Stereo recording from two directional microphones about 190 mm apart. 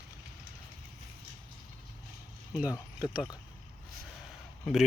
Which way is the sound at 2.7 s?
20° left (ahead or behind).